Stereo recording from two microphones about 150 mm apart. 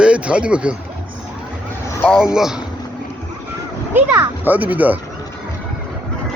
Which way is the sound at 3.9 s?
10° right (ahead or behind).